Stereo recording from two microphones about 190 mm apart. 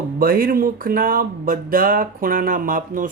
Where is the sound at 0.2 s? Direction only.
50° right (ahead or behind).